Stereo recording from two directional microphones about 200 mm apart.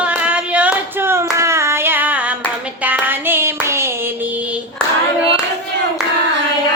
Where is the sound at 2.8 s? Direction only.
10° right (ahead or behind).